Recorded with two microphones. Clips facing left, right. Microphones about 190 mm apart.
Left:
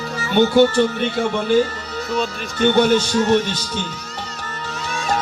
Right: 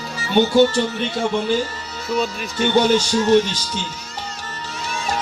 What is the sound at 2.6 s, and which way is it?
A man's voice, 55° left (ahead or behind).